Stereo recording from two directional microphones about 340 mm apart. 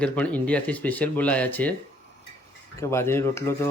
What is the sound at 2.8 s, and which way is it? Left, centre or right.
Speech, centre.